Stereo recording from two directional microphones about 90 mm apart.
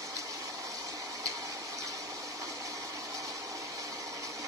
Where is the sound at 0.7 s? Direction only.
40° right (ahead or behind).